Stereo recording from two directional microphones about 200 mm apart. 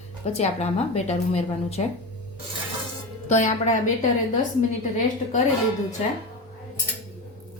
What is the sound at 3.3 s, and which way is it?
Speech, 35° left (ahead or behind).